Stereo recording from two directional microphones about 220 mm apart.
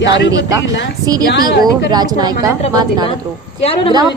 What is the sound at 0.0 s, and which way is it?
Speech, 55° left (ahead or behind).